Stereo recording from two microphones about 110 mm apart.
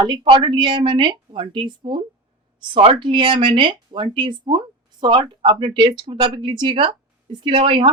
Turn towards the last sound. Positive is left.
turn(degrees=-55)  # may be behind; listen again after turning